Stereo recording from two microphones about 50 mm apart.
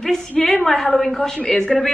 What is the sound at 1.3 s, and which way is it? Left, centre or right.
Speech, centre.